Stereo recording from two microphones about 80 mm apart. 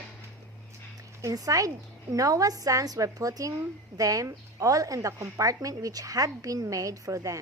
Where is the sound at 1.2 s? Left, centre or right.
Right.